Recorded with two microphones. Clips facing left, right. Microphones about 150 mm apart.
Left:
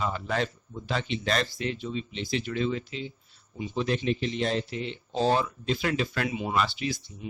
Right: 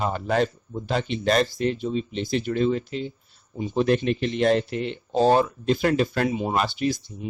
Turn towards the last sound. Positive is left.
turn(degrees=-45)  # may be behind; listen again after turning